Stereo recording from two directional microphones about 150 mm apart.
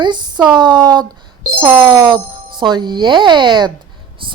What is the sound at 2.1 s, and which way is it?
Speech, 30° right (ahead or behind).